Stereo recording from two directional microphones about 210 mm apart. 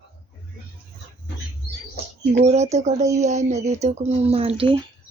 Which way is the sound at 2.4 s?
30° right (ahead or behind).